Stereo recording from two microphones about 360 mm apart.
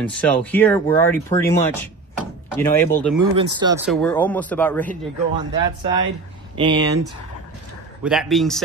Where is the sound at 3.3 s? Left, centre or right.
Centre.